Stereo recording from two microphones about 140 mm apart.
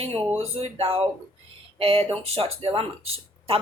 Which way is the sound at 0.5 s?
45° right (ahead or behind).